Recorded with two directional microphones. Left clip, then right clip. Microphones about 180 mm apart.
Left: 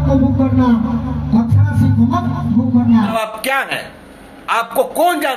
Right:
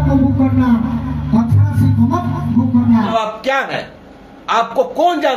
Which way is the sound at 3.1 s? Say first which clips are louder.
Right 1 dB; 10° left (ahead or behind).